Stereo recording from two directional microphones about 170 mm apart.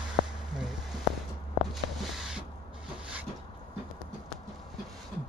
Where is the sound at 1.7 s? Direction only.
Centre (ahead or behind).